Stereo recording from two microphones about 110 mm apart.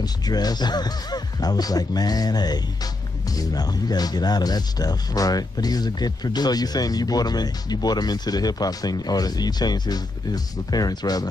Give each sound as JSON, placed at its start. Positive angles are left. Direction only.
{"t": 0.0, "sound": "speech", "side_deg": 35}